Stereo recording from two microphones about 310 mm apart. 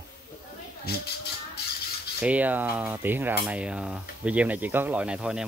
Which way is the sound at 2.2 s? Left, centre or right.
Centre.